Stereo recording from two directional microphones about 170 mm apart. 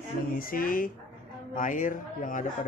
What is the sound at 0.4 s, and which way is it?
A man's voice, 55° left (ahead or behind).